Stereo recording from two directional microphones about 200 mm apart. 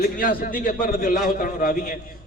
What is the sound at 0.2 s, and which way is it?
A man's voice, 45° left (ahead or behind).